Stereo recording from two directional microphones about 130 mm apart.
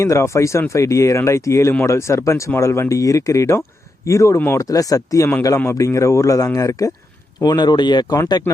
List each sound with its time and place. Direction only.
0.0 s speech: 20° left (ahead or behind)